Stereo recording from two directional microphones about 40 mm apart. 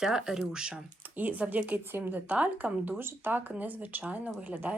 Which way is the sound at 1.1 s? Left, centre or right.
Right.